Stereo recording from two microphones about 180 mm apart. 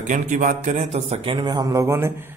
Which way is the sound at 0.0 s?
45° right (ahead or behind).